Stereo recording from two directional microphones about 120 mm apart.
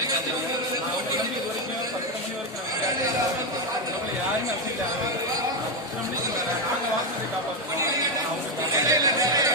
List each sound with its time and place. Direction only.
8.7 s music: 30° right (ahead or behind)